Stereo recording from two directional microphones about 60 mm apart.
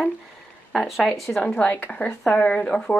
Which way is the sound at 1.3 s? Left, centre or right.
Centre.